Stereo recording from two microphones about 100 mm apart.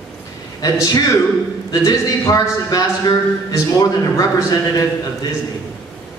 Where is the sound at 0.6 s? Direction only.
35° left (ahead or behind).